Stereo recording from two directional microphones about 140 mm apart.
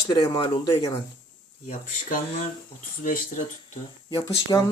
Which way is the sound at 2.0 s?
75° left (ahead or behind).